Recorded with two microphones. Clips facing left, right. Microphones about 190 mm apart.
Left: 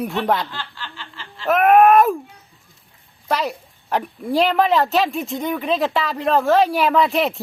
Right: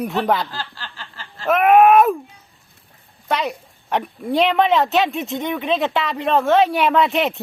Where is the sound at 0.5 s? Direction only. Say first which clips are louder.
Right 1 dB; 40° right (ahead or behind).